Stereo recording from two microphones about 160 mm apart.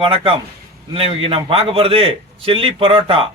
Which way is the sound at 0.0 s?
30° right (ahead or behind).